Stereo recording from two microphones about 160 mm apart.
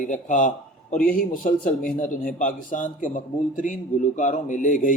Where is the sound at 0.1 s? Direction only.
50° left (ahead or behind).